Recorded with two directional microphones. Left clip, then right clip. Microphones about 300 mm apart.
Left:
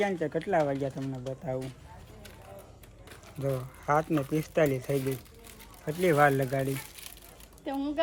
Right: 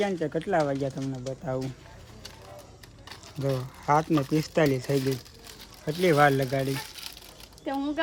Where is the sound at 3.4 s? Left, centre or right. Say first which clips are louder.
Right 3 dB; centre.